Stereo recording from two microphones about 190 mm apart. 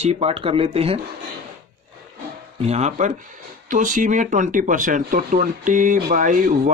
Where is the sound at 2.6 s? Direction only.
35° right (ahead or behind).